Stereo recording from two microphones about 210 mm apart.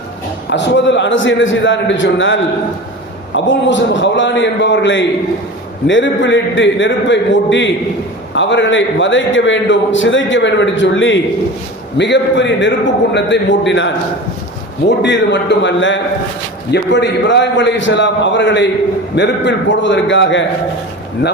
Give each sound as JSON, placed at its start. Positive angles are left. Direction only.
{"t": 0.5, "sound": "a man's voice", "side_deg": 55}